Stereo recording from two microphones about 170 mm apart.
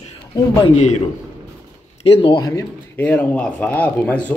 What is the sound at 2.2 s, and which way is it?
Speech, 25° left (ahead or behind).